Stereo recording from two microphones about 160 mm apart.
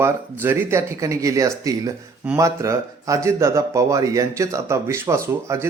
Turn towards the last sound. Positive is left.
turn(degrees=-20)  # may be behind; listen again after turning